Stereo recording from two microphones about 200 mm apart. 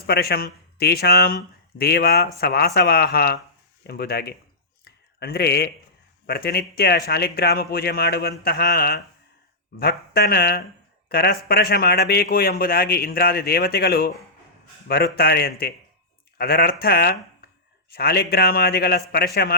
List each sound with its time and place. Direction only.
0.0 s speech: 50° left (ahead or behind)
4.9 s a sound: 50° left (ahead or behind)
6.2 s speech: 50° left (ahead or behind)